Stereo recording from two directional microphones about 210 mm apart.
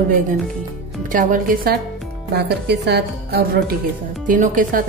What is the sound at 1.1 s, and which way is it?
Speech, 40° right (ahead or behind).